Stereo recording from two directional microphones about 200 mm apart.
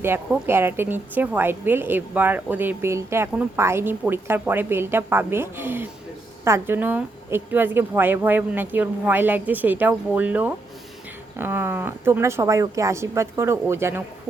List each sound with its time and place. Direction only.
0.0 s a woman's voice: 10° right (ahead or behind)